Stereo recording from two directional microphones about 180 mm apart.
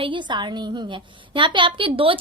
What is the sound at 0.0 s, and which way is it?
A woman's voice, 25° right (ahead or behind).